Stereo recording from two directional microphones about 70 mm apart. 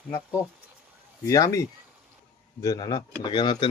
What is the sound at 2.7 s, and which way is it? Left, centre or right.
Speech, left.